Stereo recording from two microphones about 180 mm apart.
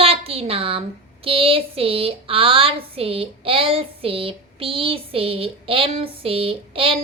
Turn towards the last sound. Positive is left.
turn(degrees=-30)  # may be behind; listen again after turning